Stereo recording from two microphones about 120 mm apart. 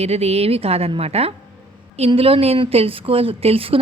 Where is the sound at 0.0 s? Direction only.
60° right (ahead or behind).